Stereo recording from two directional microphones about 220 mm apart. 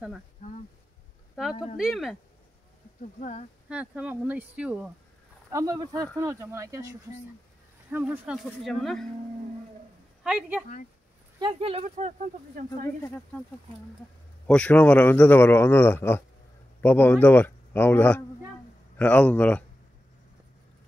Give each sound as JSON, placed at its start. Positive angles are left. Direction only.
{"t": 1.8, "sound": "speech", "side_deg": 0}
{"t": 3.2, "sound": "speech", "side_deg": 30}
{"t": 3.6, "sound": "speech", "side_deg": -5}
{"t": 10.2, "sound": "speech", "side_deg": -5}
{"t": 11.3, "sound": "speech", "side_deg": -20}
{"t": 14.5, "sound": "a man's voice", "side_deg": 5}